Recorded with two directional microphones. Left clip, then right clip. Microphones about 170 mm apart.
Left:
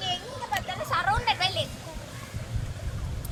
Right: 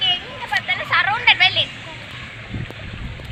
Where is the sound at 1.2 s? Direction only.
35° left (ahead or behind).